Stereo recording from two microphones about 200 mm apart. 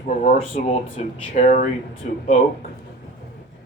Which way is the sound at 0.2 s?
35° left (ahead or behind).